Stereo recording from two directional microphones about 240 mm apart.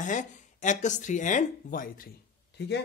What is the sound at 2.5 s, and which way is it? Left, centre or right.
Speech, left.